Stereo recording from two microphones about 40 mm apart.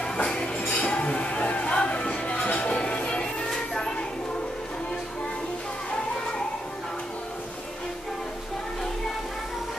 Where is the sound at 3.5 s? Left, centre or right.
Centre.